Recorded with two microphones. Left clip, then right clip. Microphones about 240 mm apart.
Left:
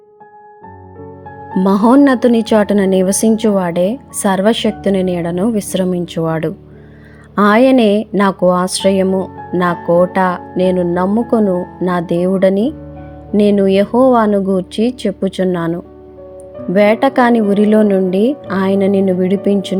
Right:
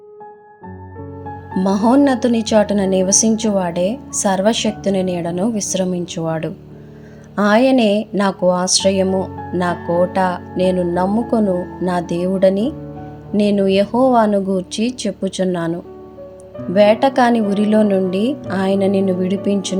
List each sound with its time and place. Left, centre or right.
1.5 s speech: left